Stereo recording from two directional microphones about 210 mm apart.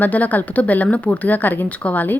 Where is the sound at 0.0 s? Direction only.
10° left (ahead or behind).